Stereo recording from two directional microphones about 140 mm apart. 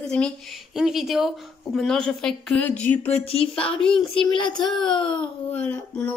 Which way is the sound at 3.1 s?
45° left (ahead or behind).